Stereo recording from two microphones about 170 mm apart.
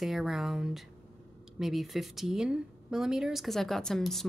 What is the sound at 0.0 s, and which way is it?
Speech, centre (ahead or behind).